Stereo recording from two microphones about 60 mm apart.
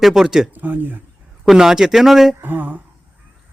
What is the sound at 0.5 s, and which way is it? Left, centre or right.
Speech, right.